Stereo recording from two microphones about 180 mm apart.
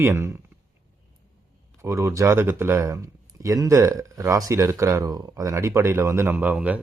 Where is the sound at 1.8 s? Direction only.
15° right (ahead or behind).